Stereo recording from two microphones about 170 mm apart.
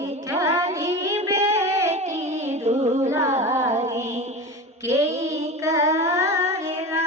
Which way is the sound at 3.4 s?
15° right (ahead or behind).